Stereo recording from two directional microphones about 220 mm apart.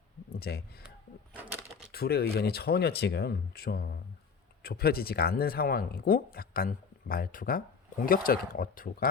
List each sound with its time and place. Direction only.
0.3 s speech: 45° left (ahead or behind)
1.9 s speech: 45° left (ahead or behind)